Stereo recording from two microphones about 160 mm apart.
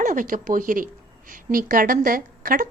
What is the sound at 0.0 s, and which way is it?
A woman's voice, 55° right (ahead or behind).